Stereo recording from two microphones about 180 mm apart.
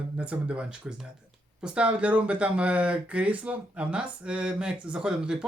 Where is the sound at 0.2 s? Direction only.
5° right (ahead or behind).